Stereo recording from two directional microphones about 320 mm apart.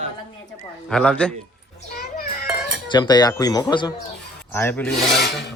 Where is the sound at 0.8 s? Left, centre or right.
Centre.